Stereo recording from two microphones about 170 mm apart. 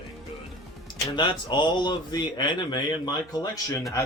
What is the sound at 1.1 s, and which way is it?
Speech, 25° left (ahead or behind).